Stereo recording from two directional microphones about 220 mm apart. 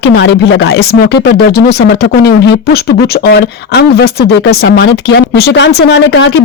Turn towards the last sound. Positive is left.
turn(degrees=50)  # may be behind; listen again after turning